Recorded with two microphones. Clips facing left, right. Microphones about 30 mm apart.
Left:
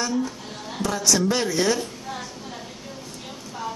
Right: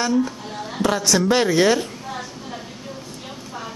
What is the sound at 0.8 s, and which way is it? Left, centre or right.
Speech, right.